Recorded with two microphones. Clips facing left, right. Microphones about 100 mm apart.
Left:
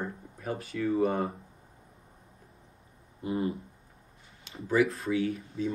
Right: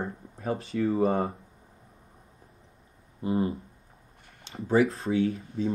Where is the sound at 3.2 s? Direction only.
30° right (ahead or behind).